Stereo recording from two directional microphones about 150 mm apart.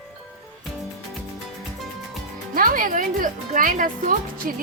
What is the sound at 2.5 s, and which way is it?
Speech, 70° right (ahead or behind).